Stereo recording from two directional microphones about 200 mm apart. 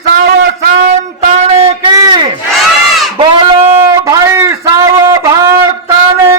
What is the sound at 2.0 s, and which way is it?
Battle cry, 20° right (ahead or behind).